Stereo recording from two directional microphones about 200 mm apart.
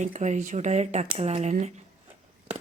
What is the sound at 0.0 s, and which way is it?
Speech, 35° right (ahead or behind).